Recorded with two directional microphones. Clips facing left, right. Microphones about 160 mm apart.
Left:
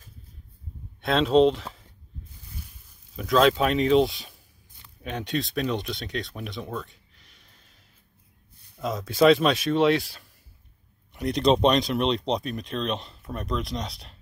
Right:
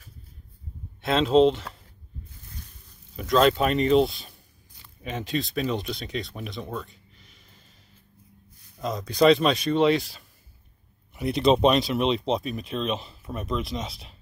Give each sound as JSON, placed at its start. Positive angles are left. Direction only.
{"t": 1.0, "sound": "speech", "side_deg": 0}
{"t": 3.2, "sound": "speech", "side_deg": 0}
{"t": 8.7, "sound": "speech", "side_deg": 0}